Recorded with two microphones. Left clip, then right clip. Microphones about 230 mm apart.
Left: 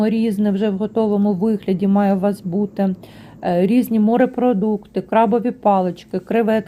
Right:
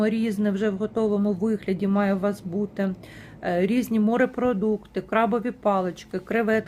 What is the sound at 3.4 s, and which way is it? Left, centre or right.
Speech, centre.